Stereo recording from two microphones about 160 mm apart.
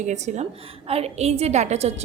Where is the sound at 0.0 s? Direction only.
45° right (ahead or behind).